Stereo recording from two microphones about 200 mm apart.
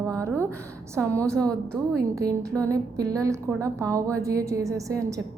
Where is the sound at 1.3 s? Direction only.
5° left (ahead or behind).